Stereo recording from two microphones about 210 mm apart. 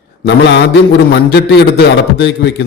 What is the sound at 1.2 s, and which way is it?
A man's voice, 50° left (ahead or behind).